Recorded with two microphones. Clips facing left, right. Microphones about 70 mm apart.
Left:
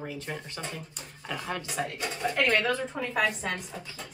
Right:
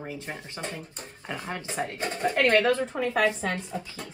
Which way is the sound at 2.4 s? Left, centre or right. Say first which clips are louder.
Right 4 dB; right.